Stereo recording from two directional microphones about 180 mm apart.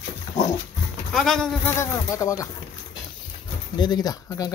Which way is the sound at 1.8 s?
15° left (ahead or behind).